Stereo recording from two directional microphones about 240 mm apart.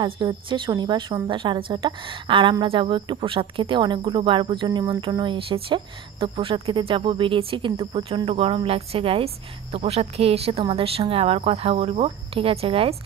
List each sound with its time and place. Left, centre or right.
0.0 s a woman's voice: centre